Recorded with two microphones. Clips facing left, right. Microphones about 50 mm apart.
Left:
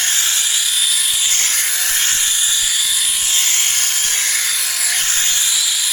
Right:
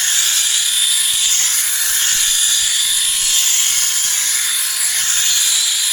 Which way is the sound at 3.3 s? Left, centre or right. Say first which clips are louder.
Left 1 dB; left.